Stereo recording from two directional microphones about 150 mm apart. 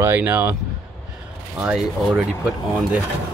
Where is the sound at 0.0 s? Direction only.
10° right (ahead or behind).